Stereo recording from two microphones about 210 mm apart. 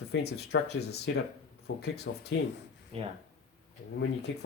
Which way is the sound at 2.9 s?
30° right (ahead or behind).